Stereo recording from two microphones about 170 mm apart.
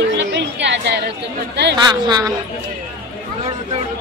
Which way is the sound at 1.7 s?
25° right (ahead or behind).